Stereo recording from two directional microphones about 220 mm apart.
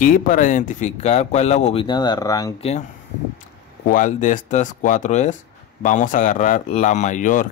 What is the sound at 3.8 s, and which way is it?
Speech, 35° left (ahead or behind).